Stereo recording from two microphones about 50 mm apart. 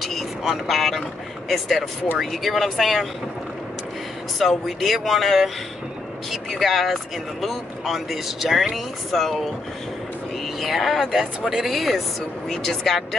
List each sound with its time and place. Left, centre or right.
0.0 s speech: centre
4.4 s speech: centre